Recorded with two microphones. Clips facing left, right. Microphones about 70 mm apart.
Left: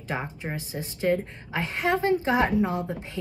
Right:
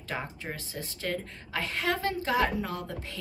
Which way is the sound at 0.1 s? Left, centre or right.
Centre.